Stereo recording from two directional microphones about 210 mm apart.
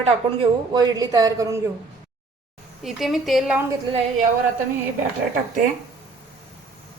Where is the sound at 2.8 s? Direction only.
Centre (ahead or behind).